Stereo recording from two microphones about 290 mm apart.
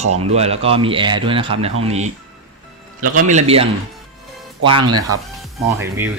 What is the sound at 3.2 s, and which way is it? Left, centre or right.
Speech, right.